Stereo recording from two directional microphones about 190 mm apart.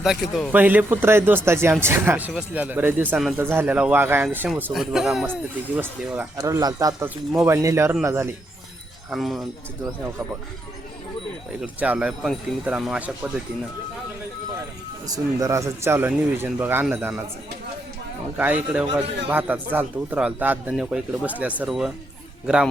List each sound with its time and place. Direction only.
0.0 s speech: centre (ahead or behind)
6.3 s speech: 20° right (ahead or behind)
9.0 s speech: centre (ahead or behind)
11.6 s speech: 5° right (ahead or behind)
15.0 s speech: 20° right (ahead or behind)
18.3 s speech: 10° right (ahead or behind)